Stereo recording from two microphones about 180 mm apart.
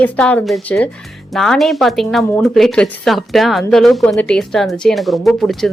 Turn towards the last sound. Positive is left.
turn(degrees=0)  # may be behind; listen again after turning